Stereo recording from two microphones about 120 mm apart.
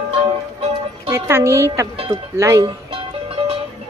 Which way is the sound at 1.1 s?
20° right (ahead or behind).